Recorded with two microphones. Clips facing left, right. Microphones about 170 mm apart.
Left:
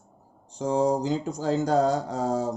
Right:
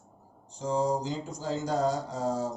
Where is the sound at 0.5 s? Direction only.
65° left (ahead or behind).